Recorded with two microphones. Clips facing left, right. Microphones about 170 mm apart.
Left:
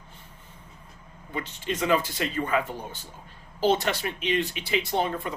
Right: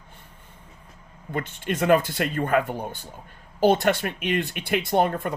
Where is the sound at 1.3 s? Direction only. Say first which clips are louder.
Right 3 dB; 55° right (ahead or behind).